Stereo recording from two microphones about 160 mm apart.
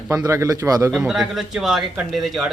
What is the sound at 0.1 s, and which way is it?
Speech, 20° right (ahead or behind).